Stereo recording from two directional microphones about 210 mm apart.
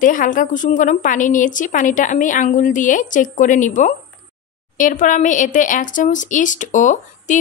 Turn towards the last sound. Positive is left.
turn(degrees=35)  # may be behind; listen again after turning